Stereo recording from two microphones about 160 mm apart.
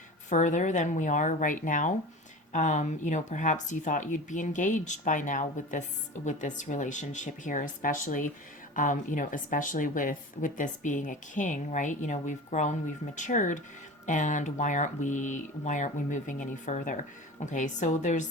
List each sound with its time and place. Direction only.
0.3 s speech: 50° left (ahead or behind)